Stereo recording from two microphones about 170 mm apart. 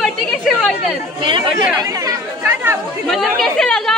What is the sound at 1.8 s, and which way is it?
Speech, 20° right (ahead or behind).